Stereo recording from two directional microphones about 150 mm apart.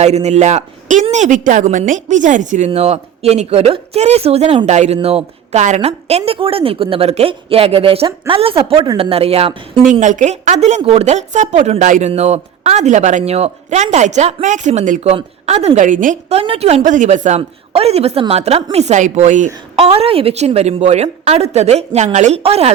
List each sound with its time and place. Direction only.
0.0 s a woman's voice: 45° right (ahead or behind)
10.0 s a woman's voice: 55° right (ahead or behind)
16.4 s a woman's voice: 40° right (ahead or behind)
19.7 s a woman's voice: 40° right (ahead or behind)